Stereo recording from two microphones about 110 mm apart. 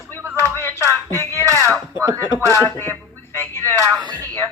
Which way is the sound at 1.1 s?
20° left (ahead or behind).